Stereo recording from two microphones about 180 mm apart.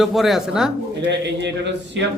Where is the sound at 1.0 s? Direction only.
75° right (ahead or behind).